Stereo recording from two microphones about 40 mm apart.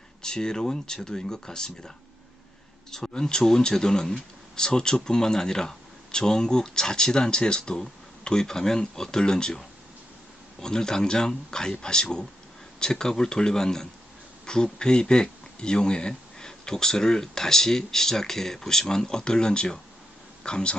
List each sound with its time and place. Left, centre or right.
0.2 s speech: centre
3.2 s speech: centre